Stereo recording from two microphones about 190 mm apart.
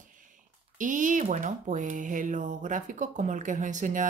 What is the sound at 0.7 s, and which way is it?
Speech, 45° right (ahead or behind).